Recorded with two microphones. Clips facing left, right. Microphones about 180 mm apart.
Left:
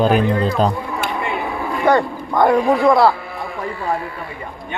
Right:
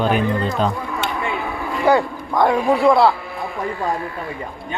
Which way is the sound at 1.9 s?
5° right (ahead or behind).